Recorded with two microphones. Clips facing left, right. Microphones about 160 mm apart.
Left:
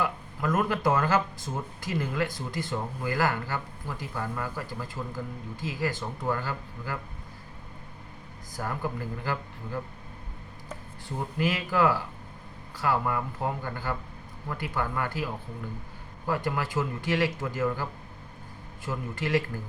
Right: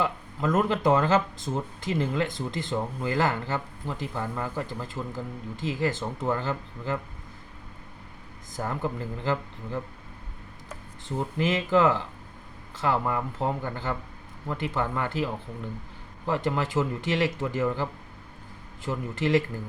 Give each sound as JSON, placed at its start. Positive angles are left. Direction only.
{"t": 0.0, "sound": "speech", "side_deg": -20}
{"t": 8.5, "sound": "speech", "side_deg": -20}
{"t": 11.3, "sound": "speech", "side_deg": -20}
{"t": 18.9, "sound": "speech", "side_deg": -20}